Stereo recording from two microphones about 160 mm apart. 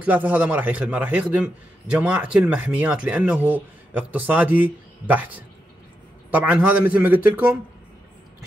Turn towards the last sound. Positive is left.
turn(degrees=-10)  # may be behind; listen again after turning